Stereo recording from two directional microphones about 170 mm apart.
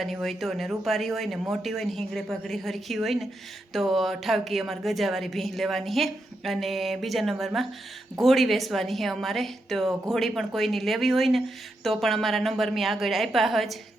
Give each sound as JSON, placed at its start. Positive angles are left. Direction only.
{"t": 0.0, "sound": "a woman's voice", "side_deg": 0}